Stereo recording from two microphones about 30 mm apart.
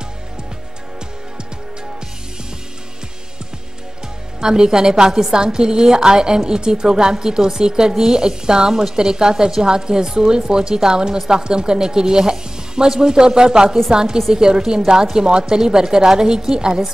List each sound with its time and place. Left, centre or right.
4.4 s speech: right